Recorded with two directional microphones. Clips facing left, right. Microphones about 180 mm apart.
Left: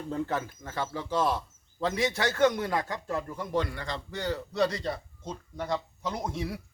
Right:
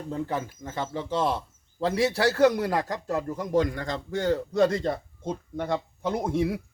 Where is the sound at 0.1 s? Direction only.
10° right (ahead or behind).